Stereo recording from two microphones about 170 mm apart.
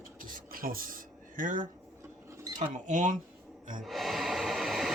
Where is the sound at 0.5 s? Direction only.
60° right (ahead or behind).